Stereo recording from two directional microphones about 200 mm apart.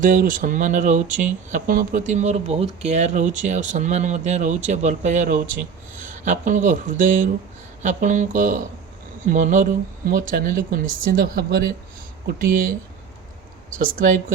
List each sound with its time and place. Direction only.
0.0 s speech: 40° right (ahead or behind)
13.7 s speech: 45° right (ahead or behind)